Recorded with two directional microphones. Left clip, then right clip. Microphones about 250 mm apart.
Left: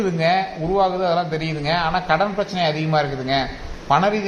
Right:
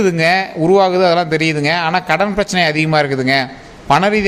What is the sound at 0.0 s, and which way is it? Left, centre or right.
A man's voice, right.